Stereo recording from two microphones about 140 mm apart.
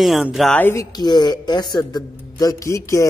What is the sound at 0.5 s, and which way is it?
Speech, 15° left (ahead or behind).